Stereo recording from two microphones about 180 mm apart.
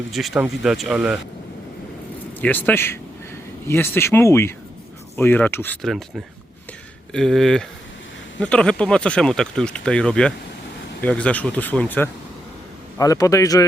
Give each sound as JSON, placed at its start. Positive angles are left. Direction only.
{"t": 0.1, "sound": "speech", "side_deg": 0}
{"t": 2.4, "sound": "speech", "side_deg": 10}
{"t": 7.1, "sound": "a man's voice", "side_deg": 5}